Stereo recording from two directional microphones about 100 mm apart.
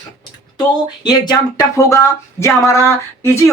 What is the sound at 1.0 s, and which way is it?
Speech, 45° left (ahead or behind).